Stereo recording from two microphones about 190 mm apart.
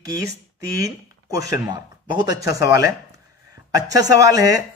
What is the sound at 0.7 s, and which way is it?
A man's voice, 15° right (ahead or behind).